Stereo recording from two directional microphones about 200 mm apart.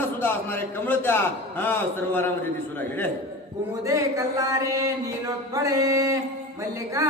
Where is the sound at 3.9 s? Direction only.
15° right (ahead or behind).